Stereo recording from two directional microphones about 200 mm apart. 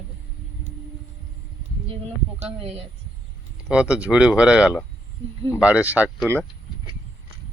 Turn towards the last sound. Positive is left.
turn(degrees=-10)  # may be behind; listen again after turning